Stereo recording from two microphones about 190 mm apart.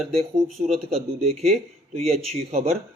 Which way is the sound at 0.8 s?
30° right (ahead or behind).